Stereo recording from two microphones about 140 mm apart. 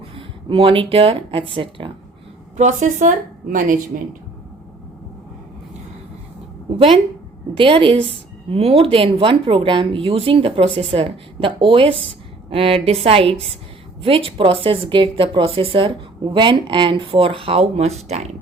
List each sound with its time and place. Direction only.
0.2 s speech: 40° right (ahead or behind)
2.6 s a woman's voice: 65° right (ahead or behind)
6.7 s speech: 40° right (ahead or behind)